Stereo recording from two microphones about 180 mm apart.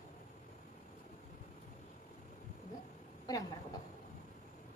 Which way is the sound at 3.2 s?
20° left (ahead or behind).